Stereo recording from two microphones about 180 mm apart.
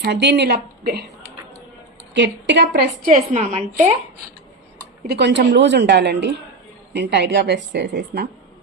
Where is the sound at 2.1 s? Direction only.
80° right.